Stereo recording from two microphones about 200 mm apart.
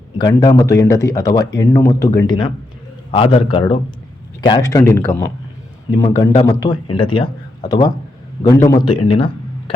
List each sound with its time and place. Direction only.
0.2 s speech: 20° left (ahead or behind)